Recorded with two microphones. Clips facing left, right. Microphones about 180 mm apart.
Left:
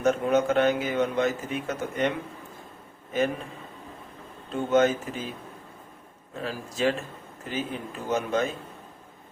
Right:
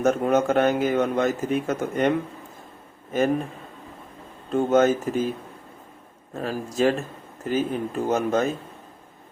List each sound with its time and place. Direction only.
0.0 s a man's voice: 45° right (ahead or behind)
4.5 s a man's voice: 45° right (ahead or behind)
6.3 s a man's voice: 45° right (ahead or behind)